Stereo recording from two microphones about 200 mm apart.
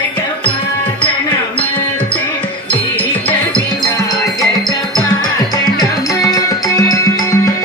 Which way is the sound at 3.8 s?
20° left (ahead or behind).